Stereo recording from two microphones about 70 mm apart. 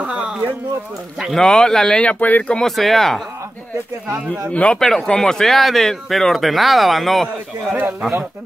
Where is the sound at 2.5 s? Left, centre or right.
Centre.